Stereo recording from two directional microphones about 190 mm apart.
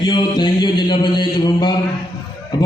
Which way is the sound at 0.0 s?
25° left (ahead or behind).